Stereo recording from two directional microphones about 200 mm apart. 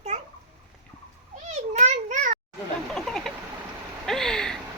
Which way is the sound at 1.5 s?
35° right (ahead or behind).